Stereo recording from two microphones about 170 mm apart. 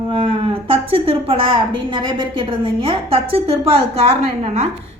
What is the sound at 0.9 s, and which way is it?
A woman's voice, 30° right (ahead or behind).